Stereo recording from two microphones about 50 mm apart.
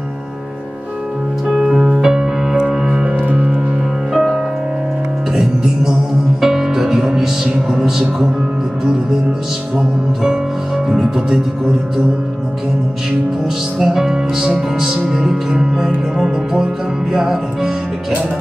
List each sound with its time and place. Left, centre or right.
1.5 s music: centre
4.1 s music: centre
9.8 s music: centre
13.7 s music: centre